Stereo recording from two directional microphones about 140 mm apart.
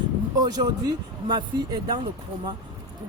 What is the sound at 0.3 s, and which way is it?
Speech, 30° right (ahead or behind).